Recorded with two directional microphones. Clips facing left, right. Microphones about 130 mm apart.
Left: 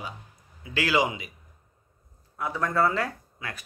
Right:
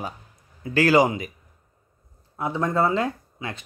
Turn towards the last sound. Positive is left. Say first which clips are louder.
# right 6 dB
turn(degrees=-20)  # may be behind; listen again after turning